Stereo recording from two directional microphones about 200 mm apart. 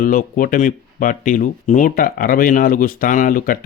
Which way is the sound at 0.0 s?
40° left (ahead or behind).